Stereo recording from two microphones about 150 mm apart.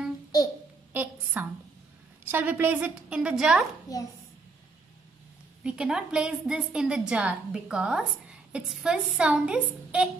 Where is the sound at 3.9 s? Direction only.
25° left (ahead or behind).